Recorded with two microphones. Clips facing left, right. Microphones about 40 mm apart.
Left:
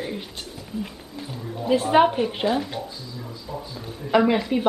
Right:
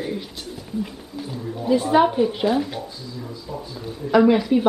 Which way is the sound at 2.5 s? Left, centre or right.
Centre.